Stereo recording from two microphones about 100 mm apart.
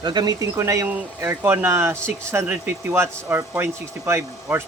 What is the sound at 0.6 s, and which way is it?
Speech, 30° right (ahead or behind).